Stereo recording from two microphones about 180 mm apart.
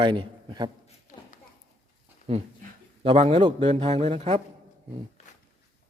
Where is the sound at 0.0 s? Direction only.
25° right (ahead or behind).